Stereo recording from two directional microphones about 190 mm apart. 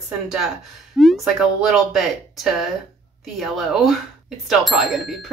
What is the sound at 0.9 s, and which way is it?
Speech, centre (ahead or behind).